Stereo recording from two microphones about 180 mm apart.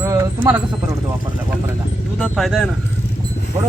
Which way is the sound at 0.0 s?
15° right (ahead or behind).